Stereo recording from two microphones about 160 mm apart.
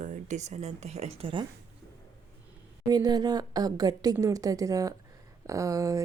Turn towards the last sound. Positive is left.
turn(degrees=-20)  # may be behind; listen again after turning